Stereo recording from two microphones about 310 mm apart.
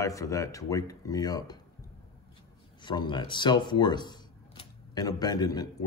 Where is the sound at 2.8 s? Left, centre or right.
Centre.